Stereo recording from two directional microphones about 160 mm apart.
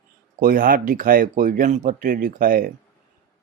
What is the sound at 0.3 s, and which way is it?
Speech, 60° right (ahead or behind).